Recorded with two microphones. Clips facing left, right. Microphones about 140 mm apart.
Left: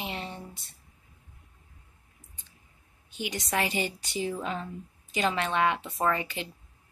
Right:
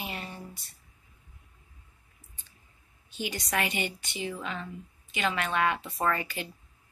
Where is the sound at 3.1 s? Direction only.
20° left (ahead or behind).